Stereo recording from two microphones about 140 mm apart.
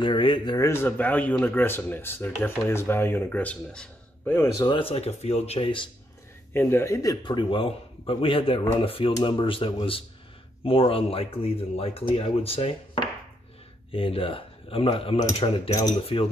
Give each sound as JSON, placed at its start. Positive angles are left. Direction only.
{"t": 0.0, "sound": "speech", "side_deg": 35}
{"t": 0.6, "sound": "speech", "side_deg": 20}
{"t": 4.7, "sound": "speech", "side_deg": 45}
{"t": 6.5, "sound": "speech", "side_deg": 15}